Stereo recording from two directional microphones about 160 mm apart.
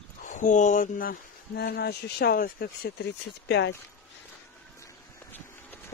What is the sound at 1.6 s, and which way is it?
Speech, 90° left.